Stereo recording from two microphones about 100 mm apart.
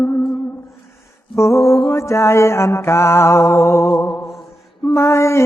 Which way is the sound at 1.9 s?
30° left (ahead or behind).